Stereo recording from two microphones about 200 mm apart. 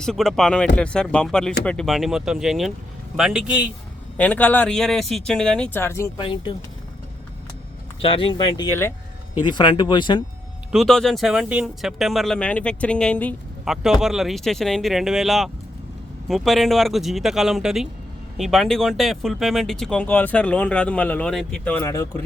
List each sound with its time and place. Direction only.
0.0 s speech: centre (ahead or behind)
4.2 s speech: 10° left (ahead or behind)
6.2 s speech: 25° left (ahead or behind)
8.0 s speech: 25° left (ahead or behind)
10.7 s speech: centre (ahead or behind)